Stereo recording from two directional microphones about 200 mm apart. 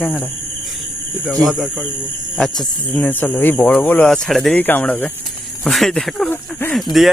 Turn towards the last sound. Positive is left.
turn(degrees=5)  # may be behind; listen again after turning